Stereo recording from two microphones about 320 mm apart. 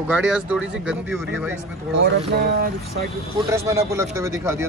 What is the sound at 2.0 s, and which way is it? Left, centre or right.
Speech, right.